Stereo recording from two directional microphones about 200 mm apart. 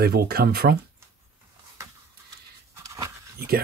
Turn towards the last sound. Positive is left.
turn(degrees=-50)  # may be behind; listen again after turning